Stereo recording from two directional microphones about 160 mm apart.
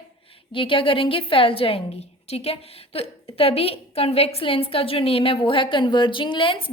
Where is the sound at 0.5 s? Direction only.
30° left (ahead or behind).